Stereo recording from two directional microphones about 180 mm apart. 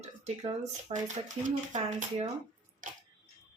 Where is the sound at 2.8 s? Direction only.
45° right (ahead or behind).